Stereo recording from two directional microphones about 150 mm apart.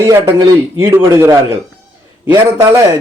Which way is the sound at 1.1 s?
15° right (ahead or behind).